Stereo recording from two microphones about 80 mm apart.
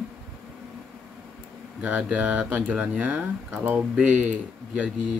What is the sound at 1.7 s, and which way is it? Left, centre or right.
Speech, centre.